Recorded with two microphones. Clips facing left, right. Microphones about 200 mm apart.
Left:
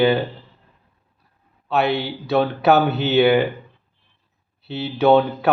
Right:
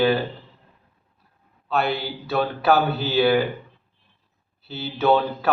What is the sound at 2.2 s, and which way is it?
Speech, 20° left (ahead or behind).